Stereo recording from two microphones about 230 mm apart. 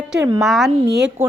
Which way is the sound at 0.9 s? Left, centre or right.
Right.